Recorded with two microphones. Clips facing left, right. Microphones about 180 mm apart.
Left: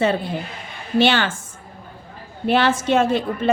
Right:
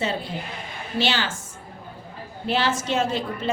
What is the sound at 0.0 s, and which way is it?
A woman's voice, 55° left (ahead or behind).